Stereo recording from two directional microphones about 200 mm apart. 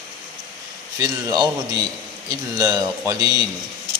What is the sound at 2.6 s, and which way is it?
Speech, 15° right (ahead or behind).